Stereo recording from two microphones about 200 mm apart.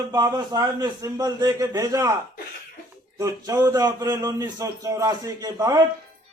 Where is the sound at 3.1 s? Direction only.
15° right (ahead or behind).